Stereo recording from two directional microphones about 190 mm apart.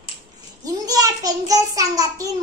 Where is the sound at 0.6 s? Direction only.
20° right (ahead or behind).